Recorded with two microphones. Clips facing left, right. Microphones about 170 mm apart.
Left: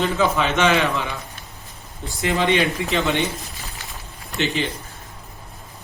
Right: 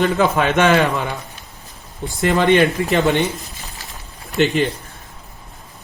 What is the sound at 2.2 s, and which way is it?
Speech, 60° right (ahead or behind).